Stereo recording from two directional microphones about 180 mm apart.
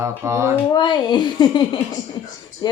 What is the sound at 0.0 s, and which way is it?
Speech, 15° right (ahead or behind).